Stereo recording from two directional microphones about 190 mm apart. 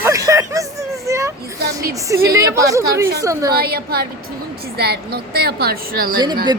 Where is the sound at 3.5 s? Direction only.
55° right (ahead or behind).